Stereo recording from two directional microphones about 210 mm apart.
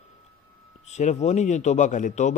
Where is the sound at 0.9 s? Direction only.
35° left (ahead or behind).